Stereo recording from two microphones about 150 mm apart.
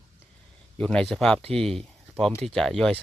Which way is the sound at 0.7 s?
5° left (ahead or behind).